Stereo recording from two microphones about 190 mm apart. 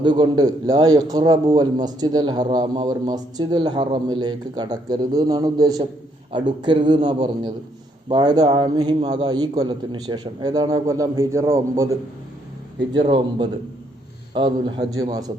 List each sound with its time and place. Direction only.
0.0 s a man's voice: 25° right (ahead or behind)
13.0 s a man's voice: 25° right (ahead or behind)